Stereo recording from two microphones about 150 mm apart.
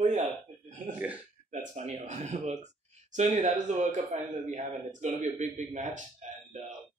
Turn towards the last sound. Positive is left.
turn(degrees=-55)  # may be behind; listen again after turning